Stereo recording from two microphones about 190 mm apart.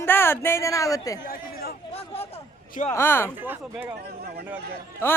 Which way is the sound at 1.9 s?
30° left (ahead or behind).